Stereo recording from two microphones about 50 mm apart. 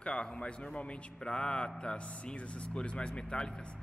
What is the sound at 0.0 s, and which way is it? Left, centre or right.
A man's voice, centre.